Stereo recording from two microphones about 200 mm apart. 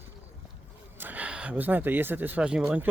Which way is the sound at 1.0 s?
10° right (ahead or behind).